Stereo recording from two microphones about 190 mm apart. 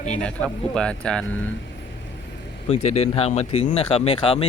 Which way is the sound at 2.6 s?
35° left (ahead or behind).